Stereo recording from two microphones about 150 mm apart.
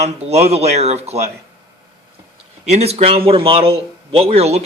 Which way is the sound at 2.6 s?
45° right (ahead or behind).